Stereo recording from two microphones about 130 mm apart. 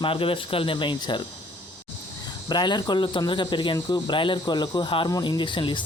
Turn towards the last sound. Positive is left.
turn(degrees=40)  # may be behind; listen again after turning